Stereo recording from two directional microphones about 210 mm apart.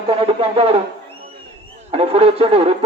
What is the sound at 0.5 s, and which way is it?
Speech, 25° right (ahead or behind).